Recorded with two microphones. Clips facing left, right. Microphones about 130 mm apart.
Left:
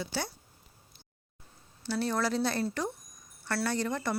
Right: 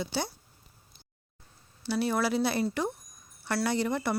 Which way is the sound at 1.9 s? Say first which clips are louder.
Right 2 dB; 10° right (ahead or behind).